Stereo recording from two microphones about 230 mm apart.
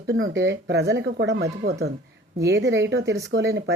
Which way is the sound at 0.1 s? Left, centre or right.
Right.